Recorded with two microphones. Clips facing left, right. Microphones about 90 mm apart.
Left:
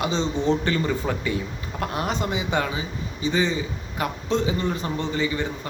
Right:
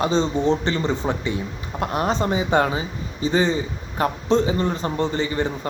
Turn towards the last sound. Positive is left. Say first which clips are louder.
# right 3 dB
turn(degrees=-35)  # may be behind; listen again after turning